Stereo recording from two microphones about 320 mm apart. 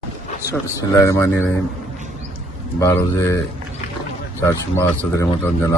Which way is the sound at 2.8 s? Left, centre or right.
Centre.